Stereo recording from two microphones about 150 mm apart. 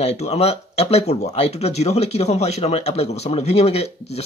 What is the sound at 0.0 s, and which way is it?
Speech, 45° left (ahead or behind).